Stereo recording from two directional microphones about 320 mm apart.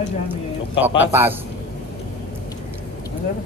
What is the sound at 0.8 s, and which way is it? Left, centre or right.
Speech, centre.